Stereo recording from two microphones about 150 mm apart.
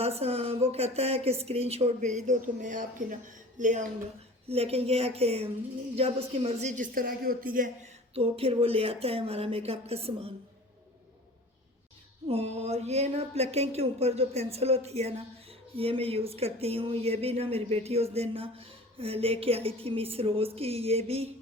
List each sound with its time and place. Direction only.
0.0 s speech: 45° right (ahead or behind)
4.4 s speech: 40° right (ahead or behind); by 7.7 s 65° right (ahead or behind)
8.1 s speech: 40° right (ahead or behind)
12.3 s speech: 45° right (ahead or behind)